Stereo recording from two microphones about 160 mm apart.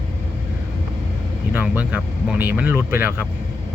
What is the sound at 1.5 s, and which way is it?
Speech, 10° right (ahead or behind).